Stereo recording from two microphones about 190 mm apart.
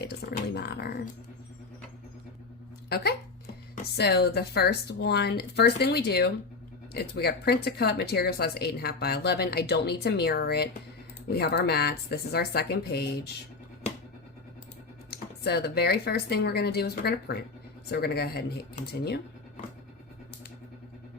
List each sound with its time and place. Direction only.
0.0 s speech: 55° left (ahead or behind)
2.9 s speech: 55° left (ahead or behind)
15.1 s speech: 60° left (ahead or behind)